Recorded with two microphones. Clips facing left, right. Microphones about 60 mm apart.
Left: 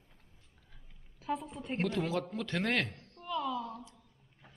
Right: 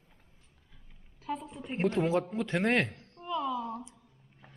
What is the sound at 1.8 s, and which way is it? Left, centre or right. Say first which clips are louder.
A man's voice: right 6 dB; right.